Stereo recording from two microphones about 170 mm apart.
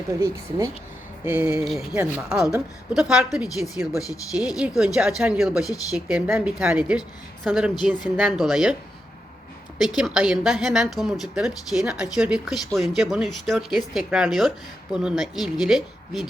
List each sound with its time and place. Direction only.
0.1 s a woman's voice: 15° right (ahead or behind)
3.9 s speech: 20° left (ahead or behind)
4.4 s a woman's voice: 5° right (ahead or behind)
9.7 s a woman's voice: 5° right (ahead or behind)